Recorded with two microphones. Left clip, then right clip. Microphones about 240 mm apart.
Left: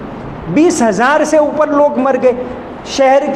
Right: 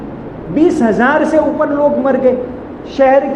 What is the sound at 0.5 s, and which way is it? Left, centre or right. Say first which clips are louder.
A woman's voice: left 1 dB; left.